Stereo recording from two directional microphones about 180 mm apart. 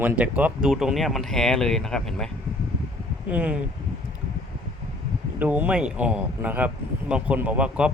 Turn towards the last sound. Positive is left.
turn(degrees=-5)  # may be behind; listen again after turning